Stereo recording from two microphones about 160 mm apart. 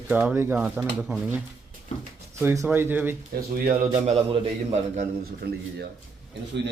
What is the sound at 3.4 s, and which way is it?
Speech, 70° right (ahead or behind).